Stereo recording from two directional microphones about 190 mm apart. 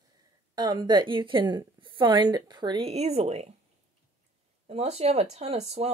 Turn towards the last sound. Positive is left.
turn(degrees=-35)  # may be behind; listen again after turning